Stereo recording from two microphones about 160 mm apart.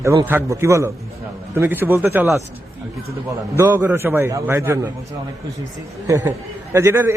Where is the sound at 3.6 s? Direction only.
15° right (ahead or behind).